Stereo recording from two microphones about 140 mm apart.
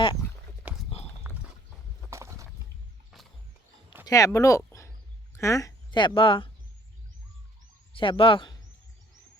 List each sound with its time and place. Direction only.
0.7 s horse: 10° right (ahead or behind)
2.0 s clip-clop: 20° right (ahead or behind)
4.0 s speech: 25° left (ahead or behind)
7.9 s speech: 40° left (ahead or behind)